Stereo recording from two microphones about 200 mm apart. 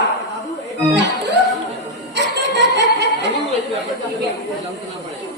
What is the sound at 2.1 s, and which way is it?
Music, 60° right (ahead or behind).